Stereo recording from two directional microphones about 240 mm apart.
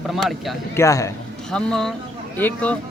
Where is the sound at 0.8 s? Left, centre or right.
Centre.